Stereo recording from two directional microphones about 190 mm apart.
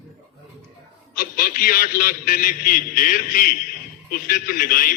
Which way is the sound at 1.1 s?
50° left (ahead or behind).